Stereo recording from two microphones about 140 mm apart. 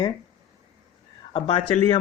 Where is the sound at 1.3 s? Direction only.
40° left (ahead or behind).